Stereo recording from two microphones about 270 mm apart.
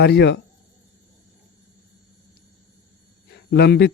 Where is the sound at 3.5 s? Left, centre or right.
Left.